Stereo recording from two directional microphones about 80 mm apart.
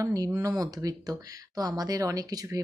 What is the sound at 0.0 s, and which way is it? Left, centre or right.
Speech, right.